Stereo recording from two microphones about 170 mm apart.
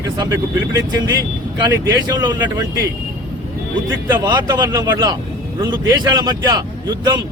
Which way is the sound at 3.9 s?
25° right (ahead or behind).